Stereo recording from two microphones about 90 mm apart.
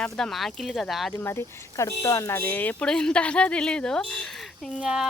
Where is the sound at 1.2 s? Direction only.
30° left (ahead or behind).